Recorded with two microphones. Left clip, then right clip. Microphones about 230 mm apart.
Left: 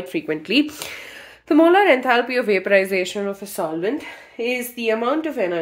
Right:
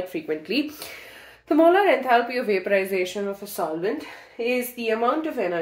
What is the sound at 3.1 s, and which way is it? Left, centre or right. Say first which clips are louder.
Speech: left 3 dB; left.